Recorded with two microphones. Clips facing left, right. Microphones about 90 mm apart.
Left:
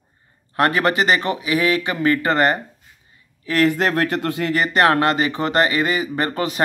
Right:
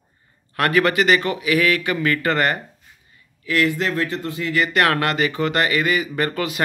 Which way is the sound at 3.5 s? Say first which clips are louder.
Left 3 dB; 45° left (ahead or behind).